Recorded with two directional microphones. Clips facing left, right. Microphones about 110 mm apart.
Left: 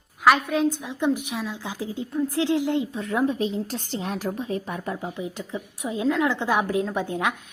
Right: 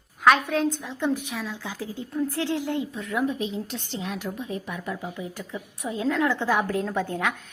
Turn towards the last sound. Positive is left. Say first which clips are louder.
# left 1 dB
turn(degrees=20)  # may be behind; listen again after turning